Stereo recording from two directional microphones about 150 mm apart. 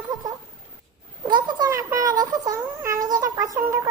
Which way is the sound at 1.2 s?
30° right (ahead or behind).